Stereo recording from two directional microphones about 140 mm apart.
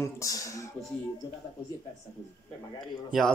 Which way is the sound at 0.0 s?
25° left (ahead or behind).